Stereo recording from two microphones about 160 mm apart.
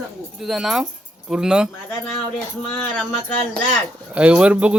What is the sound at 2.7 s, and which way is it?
Speech, 5° left (ahead or behind).